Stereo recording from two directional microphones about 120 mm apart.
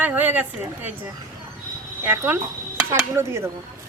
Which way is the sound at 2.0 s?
15° right (ahead or behind).